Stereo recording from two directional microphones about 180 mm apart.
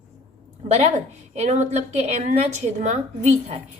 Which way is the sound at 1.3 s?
40° right (ahead or behind).